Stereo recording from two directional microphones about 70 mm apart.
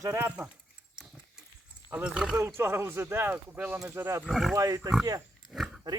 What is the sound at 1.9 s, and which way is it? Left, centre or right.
Speech, centre.